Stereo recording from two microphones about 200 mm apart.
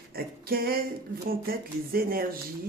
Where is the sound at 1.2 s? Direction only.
50° right (ahead or behind).